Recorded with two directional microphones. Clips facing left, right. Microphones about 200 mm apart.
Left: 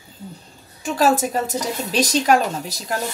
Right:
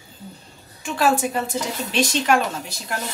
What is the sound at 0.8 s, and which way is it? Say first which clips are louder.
A woman's voice: left 2 dB; 40° left (ahead or behind).